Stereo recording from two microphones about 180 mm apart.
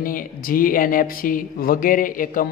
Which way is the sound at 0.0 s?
50° left (ahead or behind).